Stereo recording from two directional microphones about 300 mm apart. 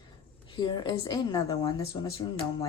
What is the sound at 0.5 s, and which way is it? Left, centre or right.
A woman's voice, centre.